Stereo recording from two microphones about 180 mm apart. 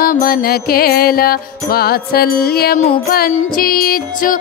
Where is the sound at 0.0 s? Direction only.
55° left (ahead or behind).